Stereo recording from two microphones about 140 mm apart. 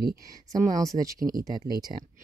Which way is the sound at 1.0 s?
25° right (ahead or behind).